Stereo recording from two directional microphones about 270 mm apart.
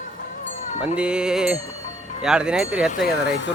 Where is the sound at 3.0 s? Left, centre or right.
Left.